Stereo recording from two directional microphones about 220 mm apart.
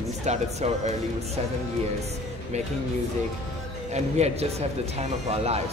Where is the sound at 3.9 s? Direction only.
30° right (ahead or behind).